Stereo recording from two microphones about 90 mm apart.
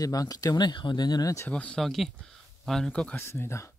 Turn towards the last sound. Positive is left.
turn(degrees=30)  # may be behind; listen again after turning